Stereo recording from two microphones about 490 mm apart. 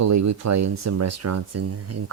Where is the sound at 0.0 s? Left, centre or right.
Right.